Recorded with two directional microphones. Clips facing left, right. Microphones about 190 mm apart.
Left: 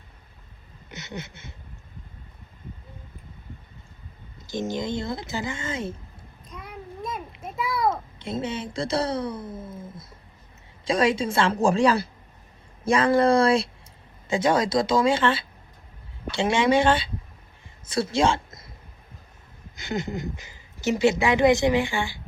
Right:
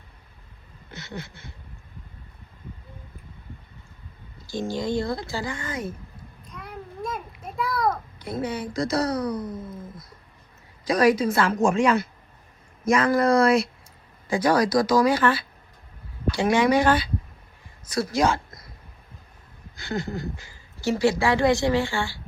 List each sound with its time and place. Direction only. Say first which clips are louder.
0.9 s a sound: even; 20° left (ahead or behind)
4.4 s speech: even; 20° left (ahead or behind)
6.5 s a sound: even; centre (ahead or behind)
7.9 s a child's voice: even; 25° left (ahead or behind)
10.8 s speech: right 3 dB; 25° left (ahead or behind)
19.7 s speech: even; 20° left (ahead or behind)